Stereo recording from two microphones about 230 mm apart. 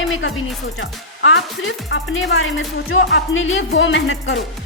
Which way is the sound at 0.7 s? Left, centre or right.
Left.